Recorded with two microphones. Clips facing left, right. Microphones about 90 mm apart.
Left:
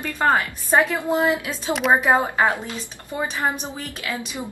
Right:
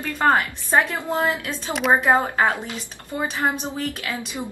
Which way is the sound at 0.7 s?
20° left (ahead or behind).